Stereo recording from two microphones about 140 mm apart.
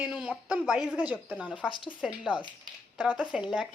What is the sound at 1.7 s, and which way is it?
Speech, 35° left (ahead or behind).